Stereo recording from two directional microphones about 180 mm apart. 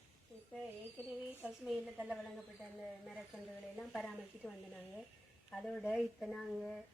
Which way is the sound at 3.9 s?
Centre (ahead or behind).